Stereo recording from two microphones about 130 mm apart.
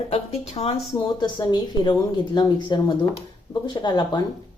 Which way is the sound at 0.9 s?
35° left (ahead or behind).